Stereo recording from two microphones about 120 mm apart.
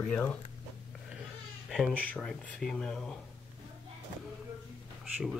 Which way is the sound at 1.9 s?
10° left (ahead or behind).